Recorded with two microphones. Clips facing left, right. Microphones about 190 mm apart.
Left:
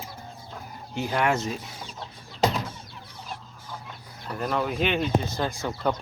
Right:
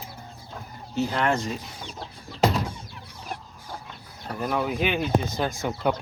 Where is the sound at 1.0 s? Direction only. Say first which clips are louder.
Right 1 dB; 10° left (ahead or behind).